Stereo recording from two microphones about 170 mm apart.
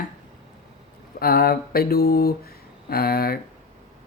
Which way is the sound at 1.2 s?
65° left (ahead or behind).